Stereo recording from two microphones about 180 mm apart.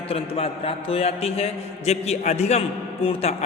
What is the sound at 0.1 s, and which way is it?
A man's voice, 30° left (ahead or behind).